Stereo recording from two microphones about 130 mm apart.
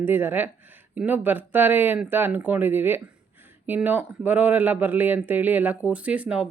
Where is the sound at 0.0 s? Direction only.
15° right (ahead or behind).